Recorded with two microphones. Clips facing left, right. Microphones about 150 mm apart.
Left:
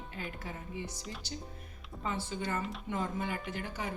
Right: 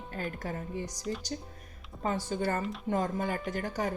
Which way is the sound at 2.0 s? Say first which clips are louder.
Right 6 dB; 40° right (ahead or behind).